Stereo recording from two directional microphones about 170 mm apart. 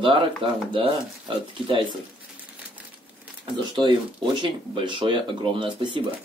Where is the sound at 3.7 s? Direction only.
25° right (ahead or behind).